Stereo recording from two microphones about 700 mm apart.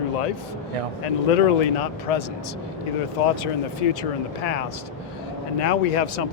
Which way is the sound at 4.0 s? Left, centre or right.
Left.